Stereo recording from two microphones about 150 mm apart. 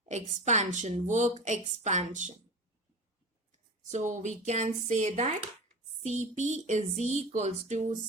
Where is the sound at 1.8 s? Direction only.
55° right (ahead or behind).